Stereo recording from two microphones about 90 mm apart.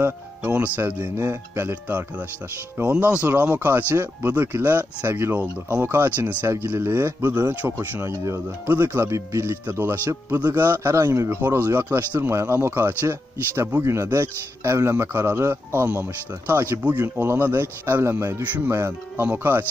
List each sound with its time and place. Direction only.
0.0 s speech: 20° right (ahead or behind)